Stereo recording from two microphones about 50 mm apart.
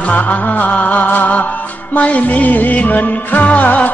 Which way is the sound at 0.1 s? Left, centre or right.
Left.